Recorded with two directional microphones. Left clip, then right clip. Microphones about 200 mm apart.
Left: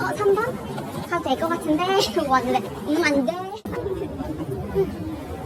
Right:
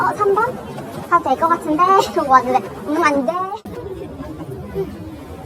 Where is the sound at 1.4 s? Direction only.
40° right (ahead or behind).